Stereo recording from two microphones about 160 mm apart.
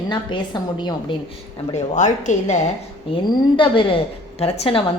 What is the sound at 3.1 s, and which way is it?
Speech, 30° left (ahead or behind).